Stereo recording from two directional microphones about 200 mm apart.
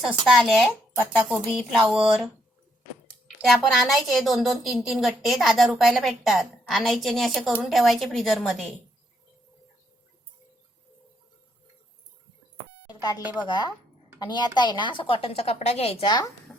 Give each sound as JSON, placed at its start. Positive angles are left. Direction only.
{"t": 0.0, "sound": "a woman's voice", "side_deg": 0}
{"t": 12.9, "sound": "beep", "side_deg": 20}
{"t": 13.2, "sound": "a woman's voice", "side_deg": -10}
{"t": 13.5, "sound": "a woman's voice", "side_deg": 20}